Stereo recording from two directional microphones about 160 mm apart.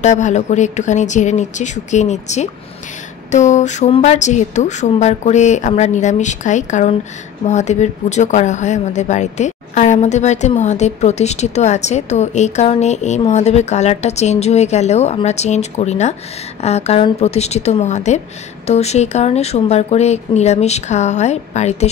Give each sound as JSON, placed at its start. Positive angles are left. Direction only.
{"t": 0.0, "sound": "a woman's voice", "side_deg": 45}